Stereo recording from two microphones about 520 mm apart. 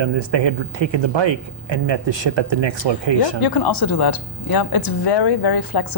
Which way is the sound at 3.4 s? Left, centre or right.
Left.